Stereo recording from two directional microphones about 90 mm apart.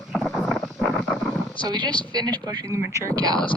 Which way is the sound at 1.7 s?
50° right (ahead or behind).